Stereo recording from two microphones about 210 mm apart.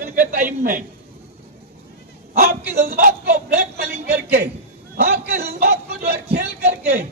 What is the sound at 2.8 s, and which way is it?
Speech, 45° right (ahead or behind).